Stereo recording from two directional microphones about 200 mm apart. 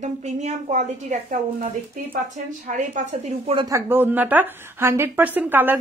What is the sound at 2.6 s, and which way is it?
A woman's voice, 35° right (ahead or behind).